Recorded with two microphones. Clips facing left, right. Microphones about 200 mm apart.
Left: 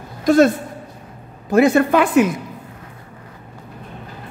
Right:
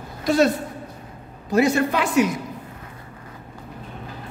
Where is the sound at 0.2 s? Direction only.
50° left (ahead or behind).